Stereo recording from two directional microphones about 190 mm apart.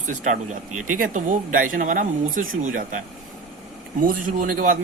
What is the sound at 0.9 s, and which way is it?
A man's voice, 45° right (ahead or behind).